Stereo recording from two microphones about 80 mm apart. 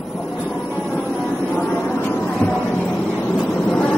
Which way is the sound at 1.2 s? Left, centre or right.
Centre.